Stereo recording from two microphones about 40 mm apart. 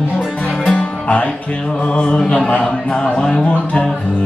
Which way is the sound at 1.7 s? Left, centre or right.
Left.